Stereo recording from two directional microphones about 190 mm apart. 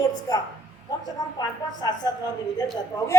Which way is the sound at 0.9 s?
20° left (ahead or behind).